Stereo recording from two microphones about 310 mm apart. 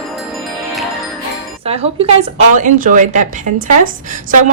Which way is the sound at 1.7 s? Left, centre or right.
Centre.